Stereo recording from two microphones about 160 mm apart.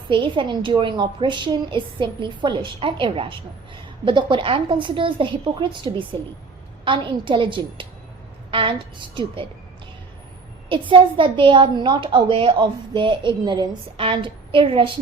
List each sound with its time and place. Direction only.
0.1 s a woman's voice: 30° right (ahead or behind)
10.7 s a woman's voice: 30° right (ahead or behind)